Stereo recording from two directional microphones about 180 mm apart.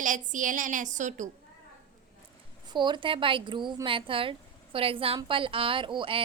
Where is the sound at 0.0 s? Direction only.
45° right (ahead or behind).